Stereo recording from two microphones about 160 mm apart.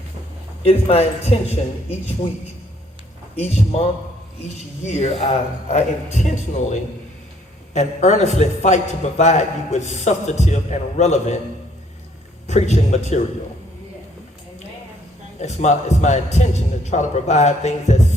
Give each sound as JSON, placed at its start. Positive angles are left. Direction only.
{"t": 0.6, "sound": "speech", "side_deg": 40}
{"t": 3.3, "sound": "speech", "side_deg": 40}
{"t": 4.9, "sound": "a man's voice", "side_deg": 40}
{"t": 12.5, "sound": "a man's voice", "side_deg": 45}
{"t": 15.4, "sound": "a man's voice", "side_deg": 45}